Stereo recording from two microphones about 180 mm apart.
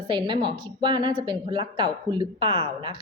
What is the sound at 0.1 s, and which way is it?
A woman's voice, 25° right (ahead or behind).